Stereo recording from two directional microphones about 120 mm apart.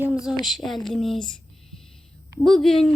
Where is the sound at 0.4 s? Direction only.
Centre (ahead or behind).